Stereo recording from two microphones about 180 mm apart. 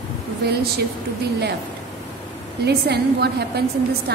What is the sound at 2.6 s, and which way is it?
A woman's voice, 65° right (ahead or behind).